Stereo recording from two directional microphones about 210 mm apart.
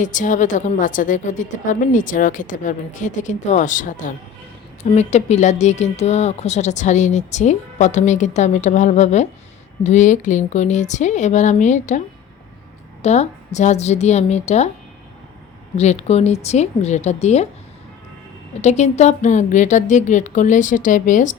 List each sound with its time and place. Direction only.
0.0 s a woman's voice: 35° left (ahead or behind)
15.8 s a woman's voice: 30° left (ahead or behind)
18.6 s a woman's voice: 35° left (ahead or behind)